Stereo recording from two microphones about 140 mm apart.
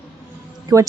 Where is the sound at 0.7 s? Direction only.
25° right (ahead or behind).